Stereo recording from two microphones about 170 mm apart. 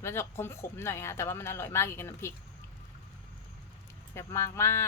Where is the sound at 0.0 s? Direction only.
15° left (ahead or behind).